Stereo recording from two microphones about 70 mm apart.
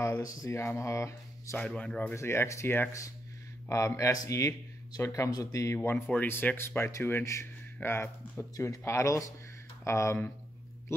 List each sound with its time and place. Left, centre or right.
0.0 s speech: left
0.5 s speech: left
5.3 s speech: left